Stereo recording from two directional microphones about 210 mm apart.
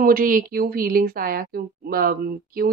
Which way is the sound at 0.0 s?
40° right (ahead or behind).